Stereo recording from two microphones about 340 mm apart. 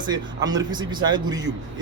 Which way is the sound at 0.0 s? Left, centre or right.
Centre.